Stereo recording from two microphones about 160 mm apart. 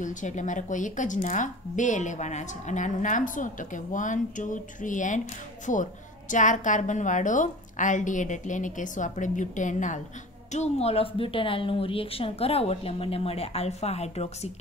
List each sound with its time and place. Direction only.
0.0 s a woman's voice: 50° left (ahead or behind)